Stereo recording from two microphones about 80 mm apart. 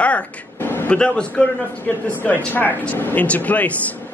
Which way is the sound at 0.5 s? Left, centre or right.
Left.